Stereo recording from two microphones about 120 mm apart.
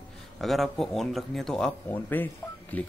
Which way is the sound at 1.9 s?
15° left (ahead or behind).